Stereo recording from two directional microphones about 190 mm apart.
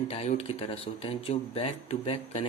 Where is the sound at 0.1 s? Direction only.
35° left (ahead or behind).